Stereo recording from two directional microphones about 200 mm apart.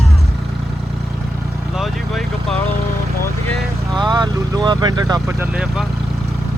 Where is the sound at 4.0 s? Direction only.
20° right (ahead or behind).